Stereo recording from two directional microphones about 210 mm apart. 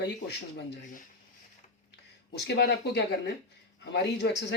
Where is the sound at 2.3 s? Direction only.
55° left (ahead or behind).